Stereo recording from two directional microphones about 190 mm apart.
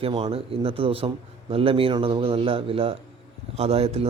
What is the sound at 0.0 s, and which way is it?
A man's voice, 30° right (ahead or behind).